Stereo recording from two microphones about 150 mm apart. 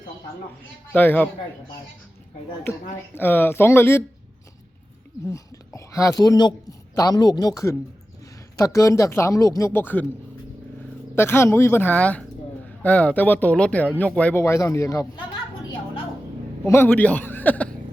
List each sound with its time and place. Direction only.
0.9 s speech: 10° left (ahead or behind)
3.2 s speech: 15° left (ahead or behind)
5.3 s a woman's voice: 20° left (ahead or behind)
11.1 s speech: 15° left (ahead or behind)
16.6 s speech: 15° left (ahead or behind)